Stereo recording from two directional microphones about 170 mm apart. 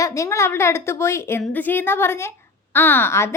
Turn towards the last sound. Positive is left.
turn(degrees=15)  # may be behind; listen again after turning